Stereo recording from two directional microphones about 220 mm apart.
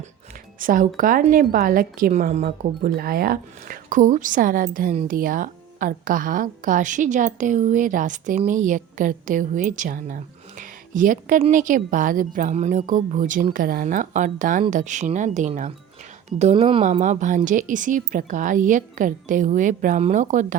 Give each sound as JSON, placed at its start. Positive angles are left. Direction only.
{"t": 0.6, "sound": "a woman's voice", "side_deg": -40}